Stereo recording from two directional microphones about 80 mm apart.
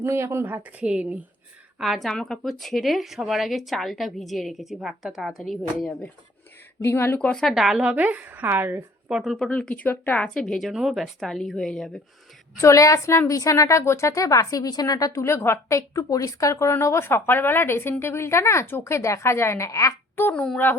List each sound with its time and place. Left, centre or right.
0.0 s speech: right; by 1.2 s centre
1.8 s a woman's voice: centre
6.8 s a woman's voice: left
7.2 s speech: centre
7.4 s a woman's voice: centre
7.9 s speech: centre
9.0 s speech: centre
9.4 s speech: centre
10.2 s speech: centre
10.7 s a woman's voice: centre
12.5 s a woman's voice: left
15.2 s a woman's voice: left
20.2 s a child's voice: left